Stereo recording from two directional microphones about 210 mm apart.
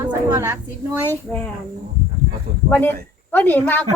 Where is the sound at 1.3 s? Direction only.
5° left (ahead or behind).